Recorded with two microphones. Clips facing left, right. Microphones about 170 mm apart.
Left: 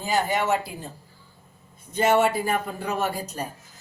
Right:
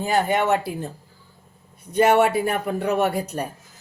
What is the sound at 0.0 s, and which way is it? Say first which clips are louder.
Speech: right 4 dB; 60° right (ahead or behind).